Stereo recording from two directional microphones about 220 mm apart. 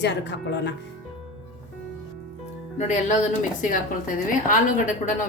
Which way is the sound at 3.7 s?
35° left (ahead or behind).